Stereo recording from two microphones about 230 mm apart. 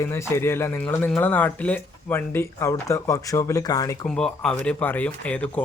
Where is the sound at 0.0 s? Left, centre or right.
Centre.